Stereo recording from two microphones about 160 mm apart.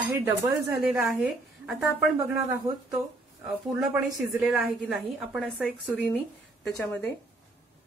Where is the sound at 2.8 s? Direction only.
5° right (ahead or behind).